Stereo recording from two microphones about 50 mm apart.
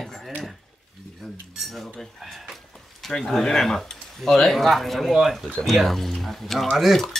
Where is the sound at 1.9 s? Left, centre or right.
Centre.